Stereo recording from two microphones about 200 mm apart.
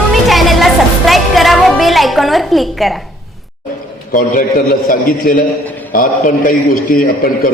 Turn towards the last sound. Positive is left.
turn(degrees=45)  # may be behind; listen again after turning